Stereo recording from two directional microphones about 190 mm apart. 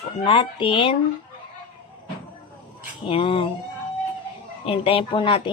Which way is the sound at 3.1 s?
25° left (ahead or behind).